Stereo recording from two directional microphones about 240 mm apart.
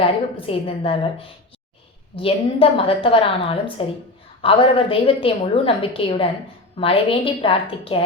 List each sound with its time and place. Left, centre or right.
0.0 s a woman's voice: left
2.1 s a woman's voice: left